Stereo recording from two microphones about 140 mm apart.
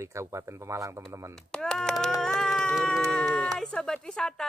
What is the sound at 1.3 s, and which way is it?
Speech, 5° left (ahead or behind).